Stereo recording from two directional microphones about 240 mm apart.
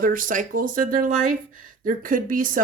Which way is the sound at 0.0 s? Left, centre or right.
Right.